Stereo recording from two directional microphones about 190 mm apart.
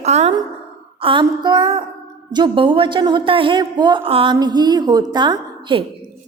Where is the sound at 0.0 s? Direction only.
35° right (ahead or behind).